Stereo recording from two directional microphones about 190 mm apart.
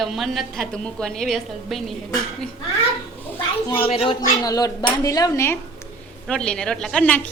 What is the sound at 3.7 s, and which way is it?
Speech, 30° left (ahead or behind).